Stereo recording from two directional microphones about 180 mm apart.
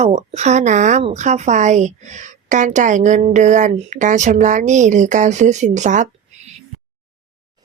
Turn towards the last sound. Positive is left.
turn(degrees=-40)  # may be behind; listen again after turning